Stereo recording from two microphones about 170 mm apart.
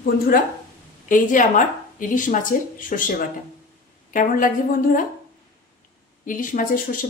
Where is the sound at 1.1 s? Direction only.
50° left (ahead or behind).